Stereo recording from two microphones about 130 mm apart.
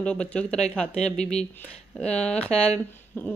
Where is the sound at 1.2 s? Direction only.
55° left (ahead or behind).